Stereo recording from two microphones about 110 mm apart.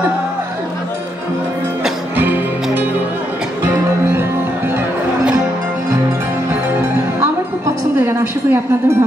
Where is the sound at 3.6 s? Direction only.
20° right (ahead or behind).